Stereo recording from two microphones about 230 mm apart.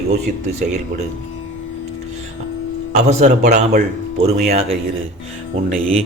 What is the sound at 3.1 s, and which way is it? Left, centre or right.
Speech, right.